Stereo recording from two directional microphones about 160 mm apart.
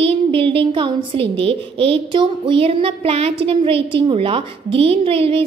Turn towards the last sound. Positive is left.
turn(degrees=-35)  # may be behind; listen again after turning